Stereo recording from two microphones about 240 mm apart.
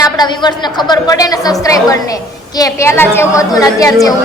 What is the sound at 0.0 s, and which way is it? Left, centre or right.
A woman's voice, centre.